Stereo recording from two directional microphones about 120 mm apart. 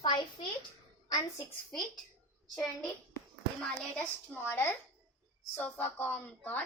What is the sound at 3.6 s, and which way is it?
Speech, 5° left (ahead or behind).